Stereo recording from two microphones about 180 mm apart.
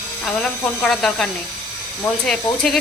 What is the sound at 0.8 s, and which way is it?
Speech, 5° left (ahead or behind).